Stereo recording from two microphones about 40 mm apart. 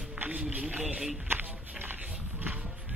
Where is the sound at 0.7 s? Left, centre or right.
Right.